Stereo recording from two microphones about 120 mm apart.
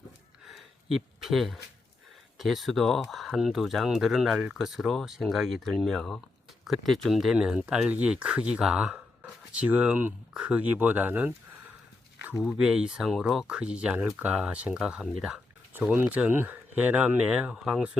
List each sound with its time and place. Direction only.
0.4 s a sound: centre (ahead or behind)
2.4 s speech: centre (ahead or behind)
12.4 s speech: 5° right (ahead or behind)